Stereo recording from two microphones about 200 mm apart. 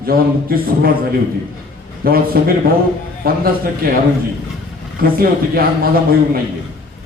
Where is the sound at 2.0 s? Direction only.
50° right (ahead or behind).